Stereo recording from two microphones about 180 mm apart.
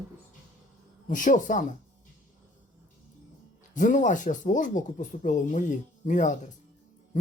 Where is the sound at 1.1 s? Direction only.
45° left (ahead or behind).